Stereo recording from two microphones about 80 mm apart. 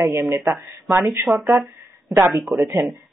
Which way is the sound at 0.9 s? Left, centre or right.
Right.